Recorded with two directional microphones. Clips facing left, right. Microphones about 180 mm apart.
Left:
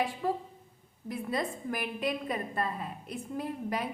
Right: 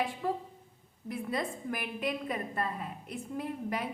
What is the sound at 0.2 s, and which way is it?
A woman's voice, 40° left (ahead or behind).